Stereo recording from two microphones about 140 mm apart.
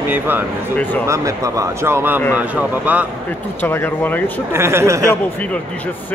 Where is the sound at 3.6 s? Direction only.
15° left (ahead or behind).